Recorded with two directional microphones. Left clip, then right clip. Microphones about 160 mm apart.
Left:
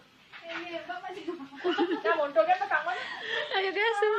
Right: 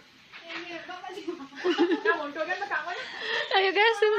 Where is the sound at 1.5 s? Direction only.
25° right (ahead or behind).